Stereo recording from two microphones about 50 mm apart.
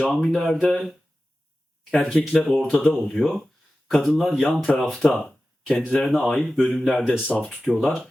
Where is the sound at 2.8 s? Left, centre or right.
Left.